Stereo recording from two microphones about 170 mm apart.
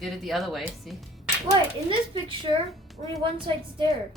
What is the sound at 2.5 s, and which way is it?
A woman's voice, 30° right (ahead or behind).